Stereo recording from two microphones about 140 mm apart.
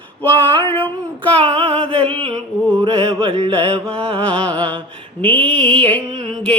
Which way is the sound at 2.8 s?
35° right (ahead or behind).